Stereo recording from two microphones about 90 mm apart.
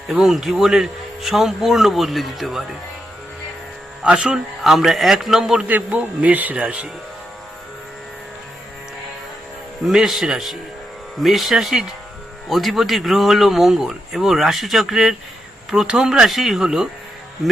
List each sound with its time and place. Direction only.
0.1 s a man's voice: 5° right (ahead or behind)
4.0 s a man's voice: 10° right (ahead or behind)
5.6 s speech: 15° right (ahead or behind)
9.8 s a man's voice: centre (ahead or behind)